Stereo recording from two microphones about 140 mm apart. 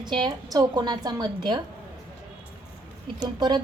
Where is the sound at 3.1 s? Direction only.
30° right (ahead or behind).